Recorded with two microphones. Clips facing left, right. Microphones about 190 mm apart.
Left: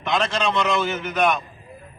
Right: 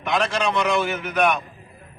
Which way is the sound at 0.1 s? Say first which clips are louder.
Even; centre (ahead or behind).